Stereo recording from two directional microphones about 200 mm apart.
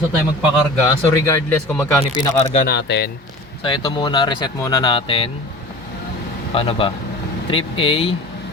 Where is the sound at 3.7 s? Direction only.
25° left (ahead or behind).